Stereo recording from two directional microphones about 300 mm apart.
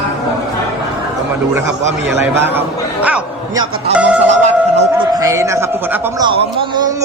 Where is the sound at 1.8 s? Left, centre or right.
Right.